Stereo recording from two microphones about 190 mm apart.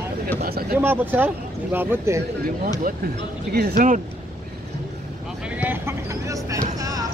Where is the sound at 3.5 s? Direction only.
55° right (ahead or behind).